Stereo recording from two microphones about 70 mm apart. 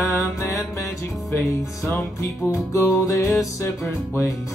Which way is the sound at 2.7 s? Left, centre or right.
Left.